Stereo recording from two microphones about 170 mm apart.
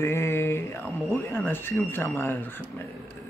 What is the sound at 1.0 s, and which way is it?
Speech, 10° left (ahead or behind).